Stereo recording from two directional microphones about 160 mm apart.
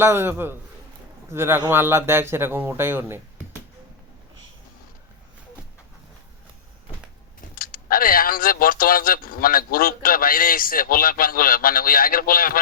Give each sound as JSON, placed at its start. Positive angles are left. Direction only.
{"t": 0.0, "sound": "speech", "side_deg": -15}
{"t": 7.5, "sound": "speech", "side_deg": 65}